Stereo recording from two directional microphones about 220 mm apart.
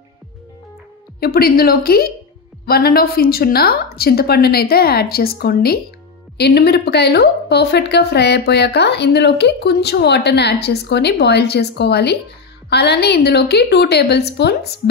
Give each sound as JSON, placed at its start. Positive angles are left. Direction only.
{"t": 1.2, "sound": "a woman's voice", "side_deg": 45}